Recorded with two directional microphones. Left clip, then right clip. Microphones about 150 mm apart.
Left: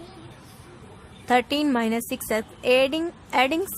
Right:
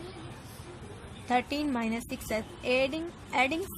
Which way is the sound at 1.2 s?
55° left (ahead or behind).